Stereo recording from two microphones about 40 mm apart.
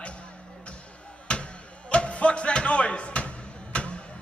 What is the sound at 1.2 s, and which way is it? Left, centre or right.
Music, left.